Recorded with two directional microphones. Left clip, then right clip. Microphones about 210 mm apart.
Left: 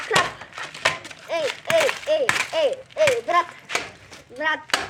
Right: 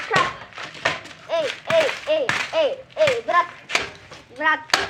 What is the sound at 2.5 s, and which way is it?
Speech, 50° left (ahead or behind).